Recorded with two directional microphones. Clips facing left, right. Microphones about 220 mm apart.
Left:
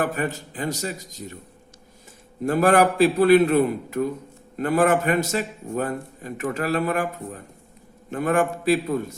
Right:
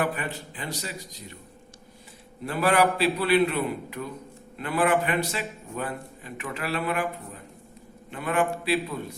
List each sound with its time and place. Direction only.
0.0 s a man's voice: 45° left (ahead or behind)
2.4 s a man's voice: 45° left (ahead or behind)